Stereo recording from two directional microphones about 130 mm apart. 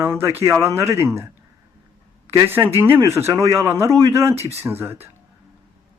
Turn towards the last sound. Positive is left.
turn(degrees=-15)  # may be behind; listen again after turning